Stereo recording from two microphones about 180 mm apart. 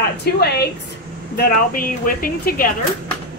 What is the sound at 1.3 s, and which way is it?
Speech, 50° left (ahead or behind).